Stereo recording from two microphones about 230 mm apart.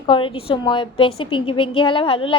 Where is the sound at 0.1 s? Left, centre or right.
Left.